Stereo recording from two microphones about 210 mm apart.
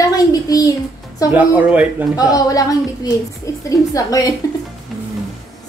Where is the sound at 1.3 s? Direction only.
5° right (ahead or behind).